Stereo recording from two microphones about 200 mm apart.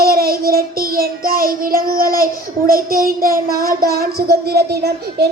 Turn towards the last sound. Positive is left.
turn(degrees=-55)  # may be behind; listen again after turning